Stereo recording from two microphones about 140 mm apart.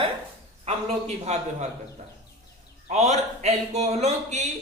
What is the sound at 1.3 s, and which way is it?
Speech, 50° right (ahead or behind).